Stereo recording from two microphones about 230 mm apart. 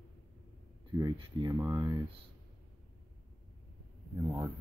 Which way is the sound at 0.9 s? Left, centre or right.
Centre.